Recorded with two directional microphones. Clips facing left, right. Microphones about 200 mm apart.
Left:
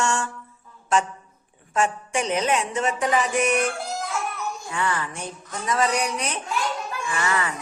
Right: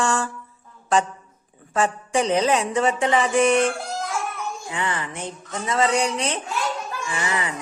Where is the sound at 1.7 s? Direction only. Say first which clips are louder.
Right 2 dB; 35° right (ahead or behind).